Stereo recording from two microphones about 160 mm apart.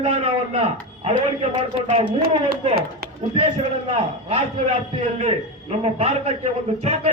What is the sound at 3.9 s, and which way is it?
Speech, 40° right (ahead or behind).